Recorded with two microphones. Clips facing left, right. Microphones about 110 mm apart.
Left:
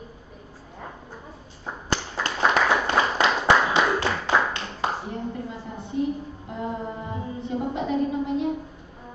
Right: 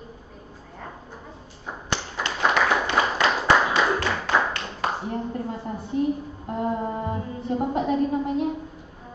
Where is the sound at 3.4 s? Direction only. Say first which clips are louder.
Even; 15° left (ahead or behind).